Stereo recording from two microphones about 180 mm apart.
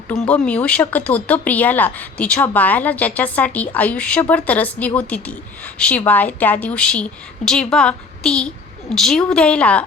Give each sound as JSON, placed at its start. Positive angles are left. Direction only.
{"t": 0.1, "sound": "a woman's voice", "side_deg": 5}